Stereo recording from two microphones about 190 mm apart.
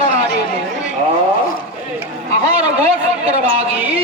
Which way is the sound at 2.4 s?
35° right (ahead or behind).